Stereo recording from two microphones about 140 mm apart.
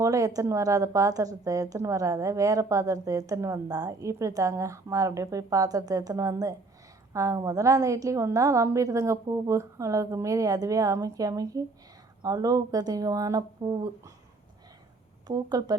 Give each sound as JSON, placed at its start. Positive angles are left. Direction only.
{"t": 0.0, "sound": "a woman's voice", "side_deg": -25}
{"t": 15.3, "sound": "a woman's voice", "side_deg": -30}